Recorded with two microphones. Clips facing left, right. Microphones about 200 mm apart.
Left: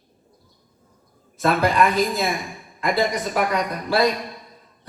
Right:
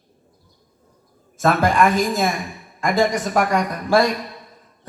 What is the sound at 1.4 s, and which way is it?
A man's voice, 45° right (ahead or behind).